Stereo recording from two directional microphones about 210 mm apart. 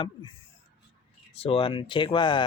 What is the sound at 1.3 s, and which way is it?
Speech, 25° left (ahead or behind).